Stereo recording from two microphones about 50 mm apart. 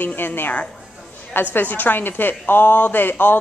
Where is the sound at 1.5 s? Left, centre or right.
Left.